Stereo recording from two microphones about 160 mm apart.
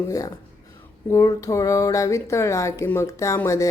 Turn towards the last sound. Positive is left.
turn(degrees=20)  # may be behind; listen again after turning